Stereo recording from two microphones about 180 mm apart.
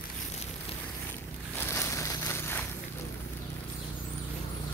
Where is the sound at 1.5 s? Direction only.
10° left (ahead or behind).